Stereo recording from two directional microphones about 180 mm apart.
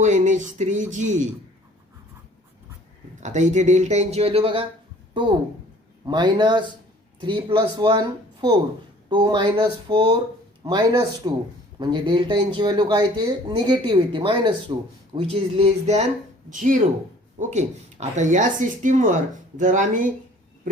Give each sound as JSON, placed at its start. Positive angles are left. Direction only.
{"t": 0.0, "sound": "speech", "side_deg": -40}
{"t": 3.2, "sound": "speech", "side_deg": -40}
{"t": 6.1, "sound": "a man's voice", "side_deg": -25}
{"t": 16.5, "sound": "speech", "side_deg": -45}